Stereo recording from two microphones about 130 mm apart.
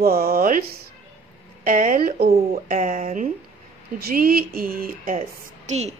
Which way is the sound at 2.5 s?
75° right (ahead or behind).